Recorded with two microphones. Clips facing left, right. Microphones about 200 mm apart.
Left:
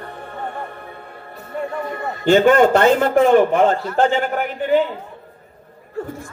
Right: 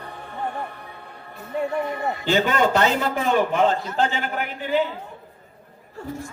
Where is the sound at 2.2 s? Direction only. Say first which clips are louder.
Left 9 dB; 50° left (ahead or behind).